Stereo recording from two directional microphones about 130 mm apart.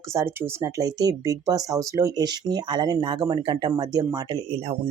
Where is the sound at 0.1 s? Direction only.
20° right (ahead or behind).